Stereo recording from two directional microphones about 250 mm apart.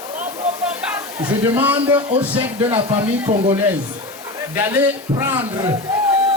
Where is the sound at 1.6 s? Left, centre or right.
Centre.